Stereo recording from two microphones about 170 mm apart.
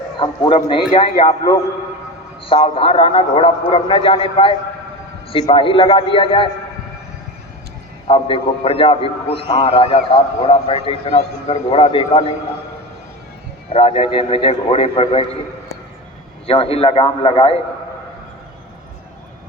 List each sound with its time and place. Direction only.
0.2 s a man's voice: 30° left (ahead or behind)
8.0 s a man's voice: 35° left (ahead or behind)
13.7 s a man's voice: 35° left (ahead or behind)